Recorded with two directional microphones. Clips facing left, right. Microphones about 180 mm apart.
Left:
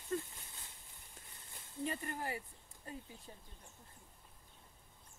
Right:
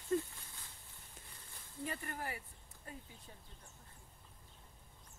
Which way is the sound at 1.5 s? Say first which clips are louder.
Left 3 dB; 20° left (ahead or behind).